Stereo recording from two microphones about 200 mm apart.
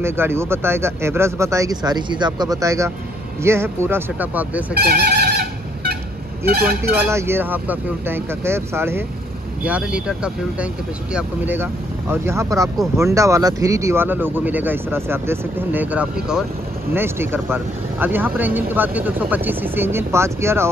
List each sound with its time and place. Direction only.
0.0 s speech: 10° right (ahead or behind)
4.7 s a sound: 50° right (ahead or behind)
6.4 s speech: 50° right (ahead or behind)
6.8 s speech: 15° right (ahead or behind)